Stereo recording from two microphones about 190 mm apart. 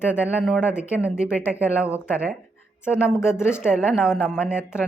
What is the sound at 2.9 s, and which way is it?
Speech, 15° left (ahead or behind).